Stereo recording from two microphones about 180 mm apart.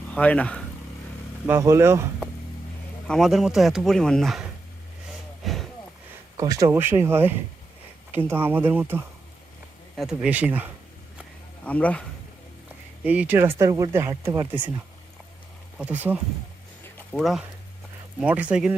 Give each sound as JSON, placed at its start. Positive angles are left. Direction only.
{"t": 0.1, "sound": "speech", "side_deg": 5}
{"t": 1.5, "sound": "speech", "side_deg": -15}
{"t": 3.1, "sound": "speech", "side_deg": 0}
{"t": 5.4, "sound": "a sound", "side_deg": 0}
{"t": 6.3, "sound": "speech", "side_deg": -20}
{"t": 11.6, "sound": "speech", "side_deg": 10}
{"t": 13.1, "sound": "speech", "side_deg": -10}
{"t": 15.8, "sound": "speech", "side_deg": -10}
{"t": 17.1, "sound": "speech", "side_deg": 0}